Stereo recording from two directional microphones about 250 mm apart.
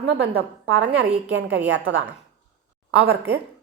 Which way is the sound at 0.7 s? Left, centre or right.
Right.